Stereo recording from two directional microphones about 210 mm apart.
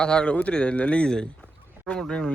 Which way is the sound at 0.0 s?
5° left (ahead or behind).